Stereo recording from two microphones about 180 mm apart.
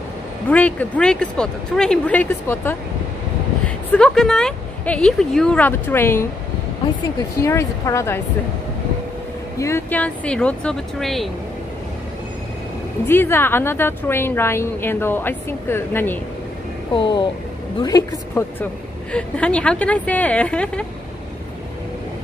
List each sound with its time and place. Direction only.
0.5 s a woman's voice: 10° left (ahead or behind)
7.4 s a woman's voice: 15° left (ahead or behind)
9.6 s a woman's voice: 15° left (ahead or behind)
13.0 s a woman's voice: 10° left (ahead or behind)
16.9 s speech: 25° left (ahead or behind)
18.4 s a woman's voice: 15° left (ahead or behind)